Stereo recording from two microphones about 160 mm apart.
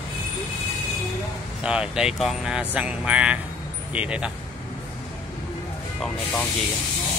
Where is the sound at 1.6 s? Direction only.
5° right (ahead or behind).